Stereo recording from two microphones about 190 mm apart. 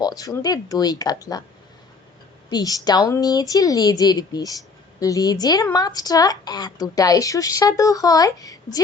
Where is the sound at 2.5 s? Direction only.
20° left (ahead or behind).